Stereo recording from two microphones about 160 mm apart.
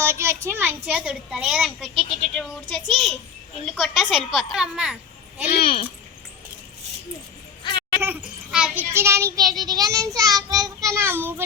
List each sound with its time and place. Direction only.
0.0 s a woman's voice: 15° right (ahead or behind)
7.6 s a sound: 30° left (ahead or behind)
8.0 s child singing: 5° right (ahead or behind)
8.9 s child singing: 15° right (ahead or behind)